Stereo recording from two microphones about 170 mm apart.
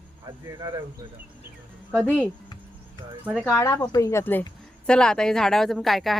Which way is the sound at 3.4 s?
15° left (ahead or behind).